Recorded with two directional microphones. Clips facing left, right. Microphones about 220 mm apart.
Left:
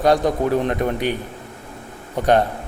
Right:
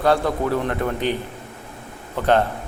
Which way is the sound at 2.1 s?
15° left (ahead or behind).